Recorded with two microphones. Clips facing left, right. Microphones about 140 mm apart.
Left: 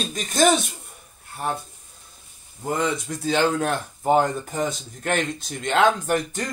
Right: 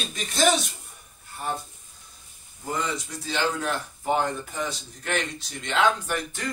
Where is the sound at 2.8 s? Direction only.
50° left (ahead or behind).